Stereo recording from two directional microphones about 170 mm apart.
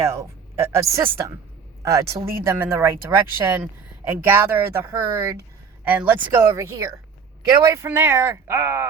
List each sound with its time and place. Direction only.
0.0 s speech: 15° right (ahead or behind)